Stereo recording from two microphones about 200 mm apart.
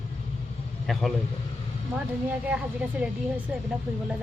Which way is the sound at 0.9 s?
Centre (ahead or behind).